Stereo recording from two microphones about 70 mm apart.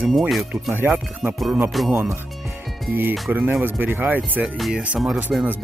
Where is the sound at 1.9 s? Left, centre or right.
Right.